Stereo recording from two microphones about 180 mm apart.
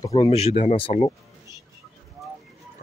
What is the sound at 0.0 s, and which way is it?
Speech, 35° left (ahead or behind).